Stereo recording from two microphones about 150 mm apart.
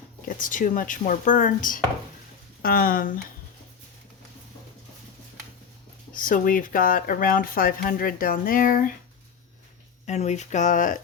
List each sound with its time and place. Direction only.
0.3 s speech: 60° left (ahead or behind)
2.6 s speech: 75° left (ahead or behind)
6.1 s speech: 65° left (ahead or behind)
10.1 s speech: 50° left (ahead or behind)